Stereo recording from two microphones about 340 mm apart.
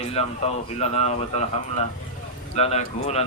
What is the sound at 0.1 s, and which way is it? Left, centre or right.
Speech, centre.